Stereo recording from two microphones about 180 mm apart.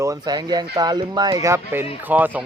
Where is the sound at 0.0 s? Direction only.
20° right (ahead or behind).